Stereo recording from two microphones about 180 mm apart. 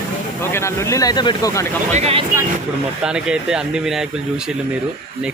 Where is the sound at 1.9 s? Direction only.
35° right (ahead or behind).